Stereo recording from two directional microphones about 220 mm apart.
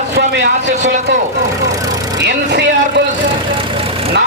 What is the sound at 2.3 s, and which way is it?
Speech, 50° right (ahead or behind).